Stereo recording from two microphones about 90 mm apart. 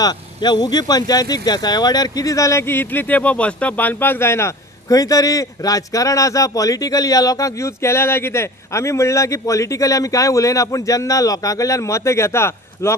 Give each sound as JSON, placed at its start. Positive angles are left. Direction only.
{"t": 0.0, "sound": "a man's voice", "side_deg": 50}
{"t": 4.8, "sound": "a man's voice", "side_deg": 40}